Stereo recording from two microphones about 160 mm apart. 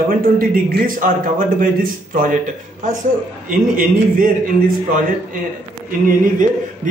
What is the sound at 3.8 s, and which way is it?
Speech, 60° right (ahead or behind).